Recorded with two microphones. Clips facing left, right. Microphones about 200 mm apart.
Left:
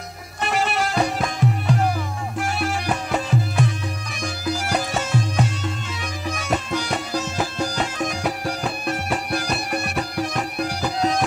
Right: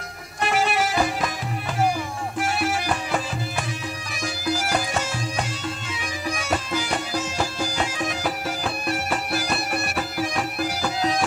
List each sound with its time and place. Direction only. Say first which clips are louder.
0.4 s music: even; centre (ahead or behind)